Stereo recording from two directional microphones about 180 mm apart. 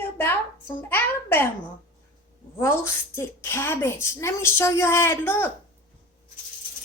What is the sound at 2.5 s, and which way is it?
A woman's voice, 15° left (ahead or behind).